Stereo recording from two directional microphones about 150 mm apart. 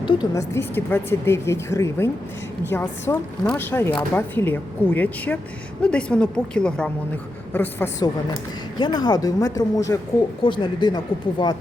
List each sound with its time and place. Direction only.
0.3 s speech: 15° left (ahead or behind)
8.8 s speech: 30° left (ahead or behind)
10.4 s speech: 30° left (ahead or behind)